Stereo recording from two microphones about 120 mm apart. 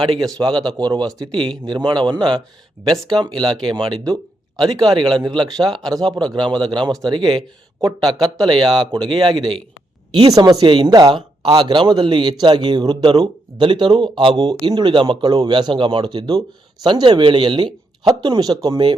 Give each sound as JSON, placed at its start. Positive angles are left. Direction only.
{"t": 0.0, "sound": "speech", "side_deg": -35}